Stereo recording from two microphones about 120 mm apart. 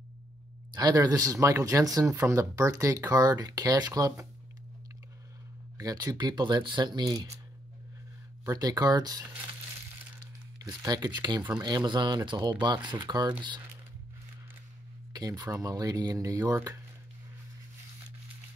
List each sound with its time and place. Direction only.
0.7 s speech: 35° right (ahead or behind)
5.8 s speech: 30° right (ahead or behind)
8.5 s speech: 35° right (ahead or behind)
10.6 s speech: 30° right (ahead or behind)
15.1 s speech: 30° right (ahead or behind)